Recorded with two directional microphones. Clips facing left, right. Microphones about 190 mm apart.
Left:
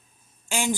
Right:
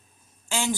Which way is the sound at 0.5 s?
15° left (ahead or behind).